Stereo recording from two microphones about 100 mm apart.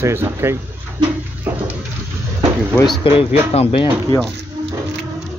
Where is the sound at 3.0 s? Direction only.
70° left (ahead or behind).